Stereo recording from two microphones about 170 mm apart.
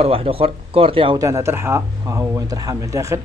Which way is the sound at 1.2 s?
15° right (ahead or behind).